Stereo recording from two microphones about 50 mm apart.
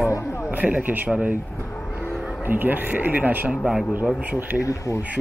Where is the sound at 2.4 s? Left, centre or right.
Right.